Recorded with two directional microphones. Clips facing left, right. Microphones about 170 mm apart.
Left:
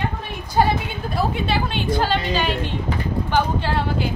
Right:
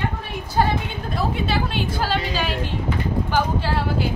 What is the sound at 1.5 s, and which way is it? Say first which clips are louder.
A woman's voice: left 2 dB; 5° right (ahead or behind).